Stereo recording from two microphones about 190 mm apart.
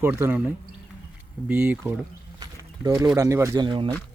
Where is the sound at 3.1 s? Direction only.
15° right (ahead or behind).